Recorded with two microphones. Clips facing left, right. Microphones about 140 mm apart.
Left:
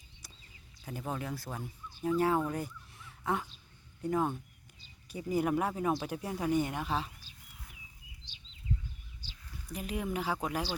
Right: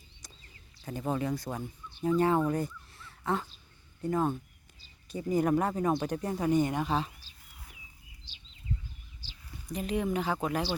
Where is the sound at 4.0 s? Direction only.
10° left (ahead or behind).